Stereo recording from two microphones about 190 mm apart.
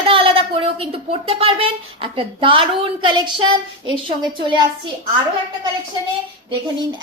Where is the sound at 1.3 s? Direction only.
30° right (ahead or behind).